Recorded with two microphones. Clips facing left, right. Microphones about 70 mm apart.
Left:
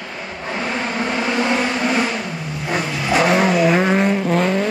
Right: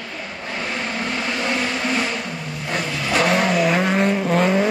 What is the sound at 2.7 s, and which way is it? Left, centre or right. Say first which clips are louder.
Vehicle: left 3 dB; centre.